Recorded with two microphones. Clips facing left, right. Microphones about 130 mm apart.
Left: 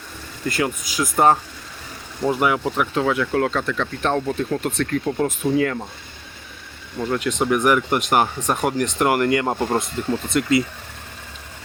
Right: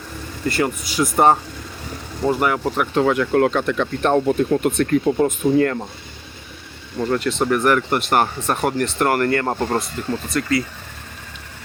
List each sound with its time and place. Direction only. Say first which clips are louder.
0.4 s speech: right 2 dB; centre (ahead or behind)
6.9 s speech: right 2 dB; centre (ahead or behind)
10.2 s speech: left 2 dB; 20° left (ahead or behind)